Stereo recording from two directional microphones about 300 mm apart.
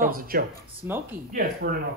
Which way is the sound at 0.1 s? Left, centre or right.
Right.